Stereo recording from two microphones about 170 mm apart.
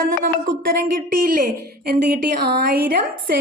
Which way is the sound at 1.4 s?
65° right (ahead or behind).